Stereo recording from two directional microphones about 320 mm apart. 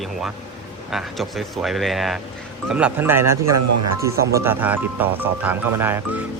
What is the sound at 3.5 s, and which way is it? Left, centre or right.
Speech, right.